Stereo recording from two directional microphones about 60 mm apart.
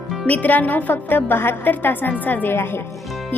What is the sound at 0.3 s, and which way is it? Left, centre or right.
A woman's voice, left.